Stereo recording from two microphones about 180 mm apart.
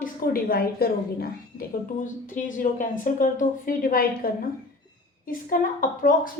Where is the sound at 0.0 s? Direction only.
55° left (ahead or behind).